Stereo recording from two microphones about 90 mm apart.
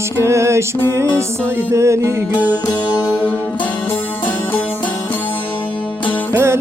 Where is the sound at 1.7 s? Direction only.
30° right (ahead or behind).